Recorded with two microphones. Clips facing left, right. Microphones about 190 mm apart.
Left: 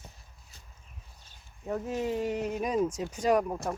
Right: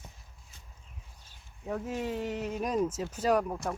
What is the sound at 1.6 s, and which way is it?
Speech, centre (ahead or behind).